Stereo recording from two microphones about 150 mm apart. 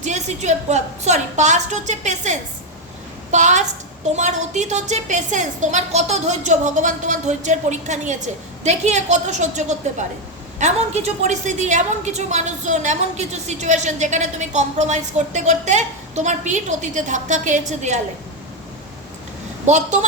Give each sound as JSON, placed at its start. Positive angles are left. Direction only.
{"t": 0.0, "sound": "a woman's voice", "side_deg": -50}
{"t": 19.6, "sound": "a woman's voice", "side_deg": -50}